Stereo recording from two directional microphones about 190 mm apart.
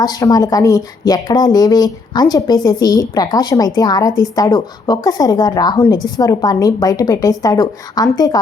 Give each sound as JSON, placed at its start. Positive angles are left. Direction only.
{"t": 0.0, "sound": "a woman's voice", "side_deg": 20}